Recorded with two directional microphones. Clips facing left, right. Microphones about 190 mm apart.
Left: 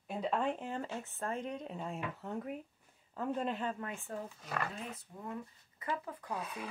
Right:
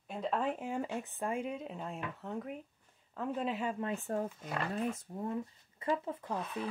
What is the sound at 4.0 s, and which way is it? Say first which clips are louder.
Speech: right 7 dB; 45° right (ahead or behind).